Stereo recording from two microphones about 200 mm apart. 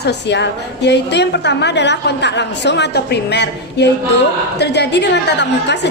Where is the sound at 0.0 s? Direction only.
60° left (ahead or behind).